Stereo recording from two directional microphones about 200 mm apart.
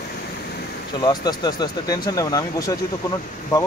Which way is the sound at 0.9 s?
20° left (ahead or behind).